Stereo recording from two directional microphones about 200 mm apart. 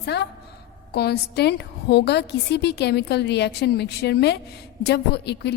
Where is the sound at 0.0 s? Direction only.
55° left (ahead or behind).